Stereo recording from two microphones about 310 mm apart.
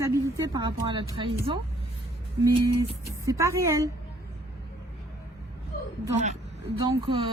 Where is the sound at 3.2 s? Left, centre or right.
Centre.